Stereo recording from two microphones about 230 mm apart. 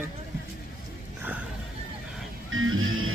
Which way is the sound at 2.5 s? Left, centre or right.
Right.